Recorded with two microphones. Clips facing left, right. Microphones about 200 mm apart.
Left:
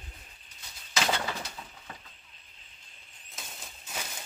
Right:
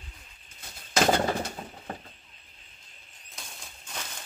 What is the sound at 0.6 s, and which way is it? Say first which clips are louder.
Bird: right 7 dB; 50° right (ahead or behind).